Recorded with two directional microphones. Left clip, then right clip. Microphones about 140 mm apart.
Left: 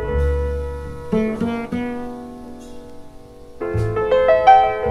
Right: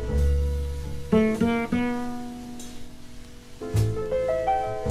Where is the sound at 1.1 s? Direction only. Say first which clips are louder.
Left 1 dB; 5° right (ahead or behind).